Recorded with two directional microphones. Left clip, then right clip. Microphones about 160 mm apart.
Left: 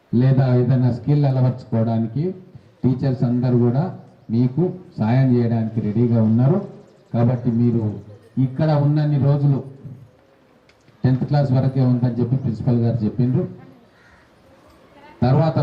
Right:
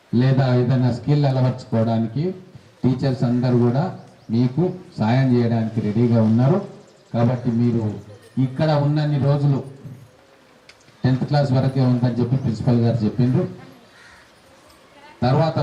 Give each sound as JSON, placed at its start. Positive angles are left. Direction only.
{"t": 0.1, "sound": "a man's voice", "side_deg": 10}
{"t": 11.0, "sound": "a man's voice", "side_deg": 10}
{"t": 15.0, "sound": "a sound", "side_deg": 10}